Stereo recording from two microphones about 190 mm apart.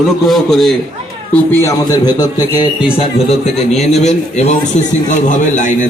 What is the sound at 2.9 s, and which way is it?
A man's voice, 30° left (ahead or behind).